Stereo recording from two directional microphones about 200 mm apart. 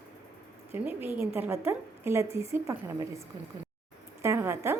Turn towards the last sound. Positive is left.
turn(degrees=-10)  # may be behind; listen again after turning